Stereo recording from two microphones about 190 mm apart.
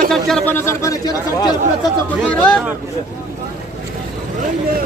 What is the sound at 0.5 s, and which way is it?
Speech, 15° left (ahead or behind).